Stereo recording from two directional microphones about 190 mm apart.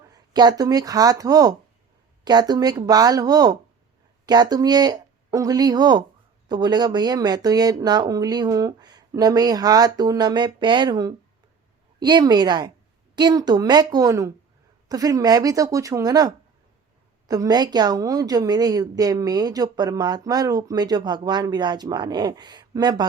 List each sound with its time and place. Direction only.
0.1 s a woman's voice: 20° right (ahead or behind)